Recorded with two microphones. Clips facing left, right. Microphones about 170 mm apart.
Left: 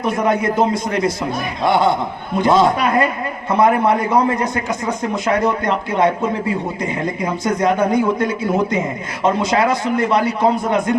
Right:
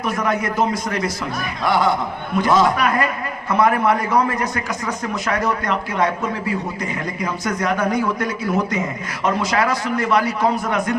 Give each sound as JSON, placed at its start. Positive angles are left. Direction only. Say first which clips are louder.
{"t": 0.0, "sound": "a man's voice", "louder": "left 4 dB", "side_deg": 25}